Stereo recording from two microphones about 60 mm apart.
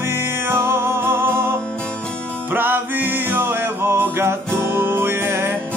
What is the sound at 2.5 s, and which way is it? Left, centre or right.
Music, right.